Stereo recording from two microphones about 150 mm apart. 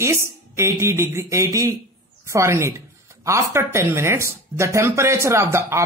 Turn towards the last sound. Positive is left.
turn(degrees=-20)  # may be behind; listen again after turning